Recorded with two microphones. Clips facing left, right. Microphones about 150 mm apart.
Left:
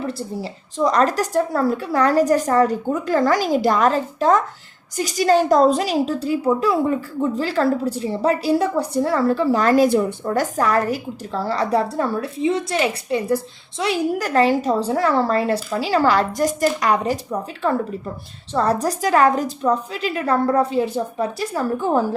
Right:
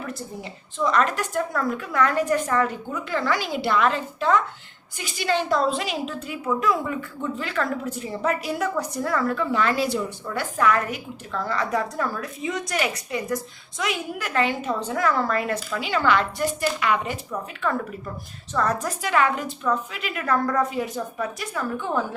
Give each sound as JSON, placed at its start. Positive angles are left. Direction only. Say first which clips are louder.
{"t": 0.0, "sound": "a woman's voice", "louder": "left 7 dB", "side_deg": 30}